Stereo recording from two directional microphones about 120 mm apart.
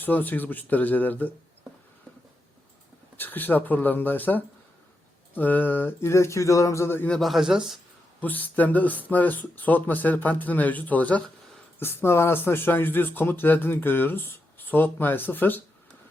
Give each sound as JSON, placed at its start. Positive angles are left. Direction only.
{"t": 0.0, "sound": "speech", "side_deg": 15}
{"t": 3.2, "sound": "speech", "side_deg": 15}
{"t": 7.1, "sound": "a man's voice", "side_deg": 0}
{"t": 8.2, "sound": "speech", "side_deg": 15}